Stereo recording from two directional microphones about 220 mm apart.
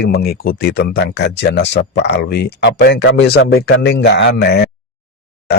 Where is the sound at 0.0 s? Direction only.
45° left (ahead or behind).